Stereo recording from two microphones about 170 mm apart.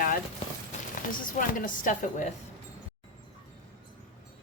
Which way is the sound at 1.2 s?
50° left (ahead or behind).